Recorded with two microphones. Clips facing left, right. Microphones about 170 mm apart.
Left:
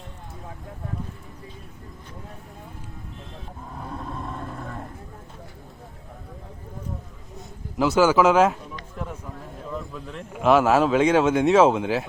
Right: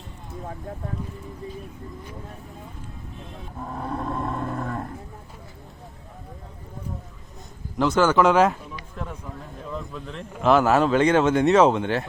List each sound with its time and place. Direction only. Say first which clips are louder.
3.8 s roaring cats: right 6 dB; 55° right (ahead or behind)
7.8 s a man's voice: left 1 dB; 5° left (ahead or behind)
9.7 s a man's voice: even; 5° left (ahead or behind)